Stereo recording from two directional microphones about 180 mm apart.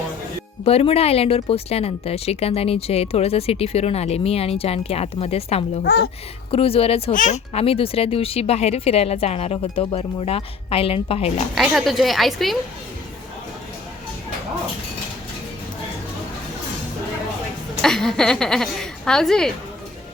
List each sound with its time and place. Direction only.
0.6 s speech: 35° left (ahead or behind)
5.8 s a woman's voice: 65° left (ahead or behind)
6.5 s speech: 30° left (ahead or behind)
7.1 s speech: 45° left (ahead or behind)
11.5 s a woman's voice: centre (ahead or behind)
17.8 s a woman's voice: 5° left (ahead or behind)